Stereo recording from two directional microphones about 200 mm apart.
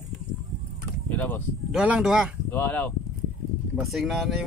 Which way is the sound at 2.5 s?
10° left (ahead or behind).